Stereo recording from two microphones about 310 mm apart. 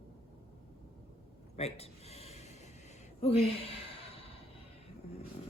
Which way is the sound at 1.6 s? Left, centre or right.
Centre.